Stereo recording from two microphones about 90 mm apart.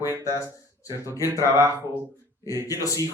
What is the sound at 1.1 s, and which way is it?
Speech, 35° left (ahead or behind).